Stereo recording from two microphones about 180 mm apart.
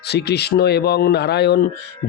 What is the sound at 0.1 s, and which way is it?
Speech, 65° left (ahead or behind).